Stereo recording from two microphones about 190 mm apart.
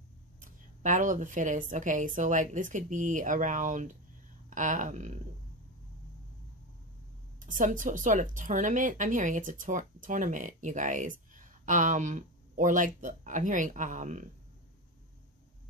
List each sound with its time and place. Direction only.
0.4 s speech: 40° right (ahead or behind)
7.3 s speech: 45° right (ahead or behind)